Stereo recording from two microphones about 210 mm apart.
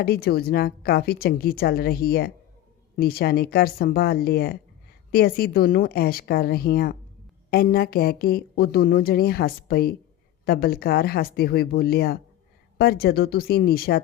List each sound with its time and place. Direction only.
0.0 s speech: 45° left (ahead or behind)